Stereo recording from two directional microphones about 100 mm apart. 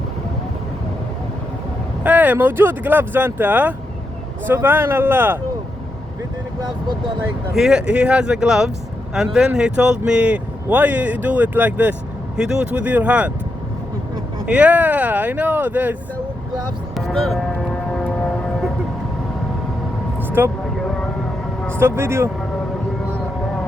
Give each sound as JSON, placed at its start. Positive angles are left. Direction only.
{"t": 2.0, "sound": "speech", "side_deg": -15}
{"t": 7.5, "sound": "speech", "side_deg": -5}
{"t": 14.4, "sound": "speech", "side_deg": -15}
{"t": 17.2, "sound": "a sound", "side_deg": 0}
{"t": 20.1, "sound": "vehicle", "side_deg": -20}
{"t": 21.7, "sound": "speech", "side_deg": -25}